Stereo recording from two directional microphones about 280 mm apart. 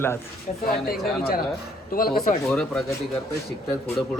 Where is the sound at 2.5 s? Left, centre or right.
Centre.